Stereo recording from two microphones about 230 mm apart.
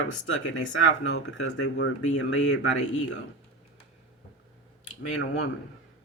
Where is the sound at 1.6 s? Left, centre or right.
Left.